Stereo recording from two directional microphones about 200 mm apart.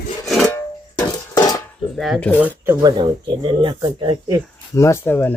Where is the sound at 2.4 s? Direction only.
10° right (ahead or behind).